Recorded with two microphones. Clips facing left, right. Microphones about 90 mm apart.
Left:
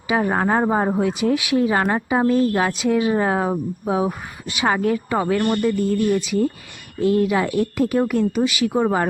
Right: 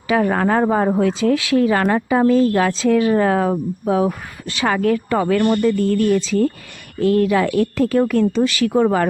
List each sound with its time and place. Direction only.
0.1 s speech: 20° left (ahead or behind)